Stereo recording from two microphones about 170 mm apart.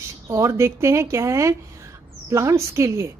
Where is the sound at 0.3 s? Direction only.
20° right (ahead or behind).